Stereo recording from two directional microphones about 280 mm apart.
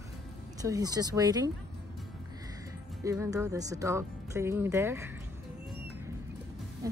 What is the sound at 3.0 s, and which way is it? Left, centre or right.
Speech, centre.